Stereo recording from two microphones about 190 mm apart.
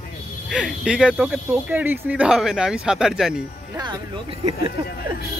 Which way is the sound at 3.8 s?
25° right (ahead or behind).